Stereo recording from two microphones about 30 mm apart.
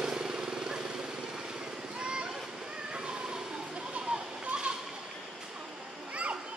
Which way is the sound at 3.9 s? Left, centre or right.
Right.